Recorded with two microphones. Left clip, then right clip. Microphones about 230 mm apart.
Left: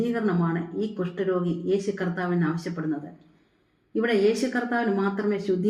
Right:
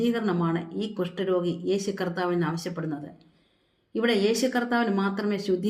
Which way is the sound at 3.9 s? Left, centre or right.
Right.